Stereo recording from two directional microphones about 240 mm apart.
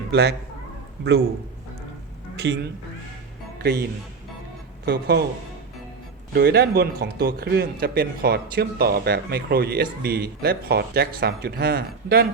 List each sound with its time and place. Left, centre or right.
0.1 s a man's voice: right
2.3 s a woman's voice: right
3.6 s speech: right
4.9 s speech: right
6.3 s speech: right